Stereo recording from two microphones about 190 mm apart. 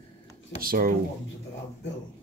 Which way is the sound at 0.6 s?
50° right (ahead or behind).